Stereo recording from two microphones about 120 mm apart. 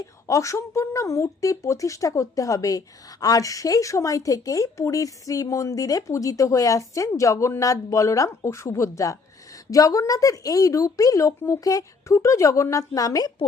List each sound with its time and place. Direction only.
0.0 s a woman's voice: 25° left (ahead or behind)